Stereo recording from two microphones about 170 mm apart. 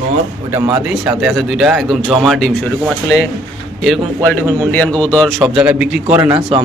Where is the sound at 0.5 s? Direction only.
15° right (ahead or behind).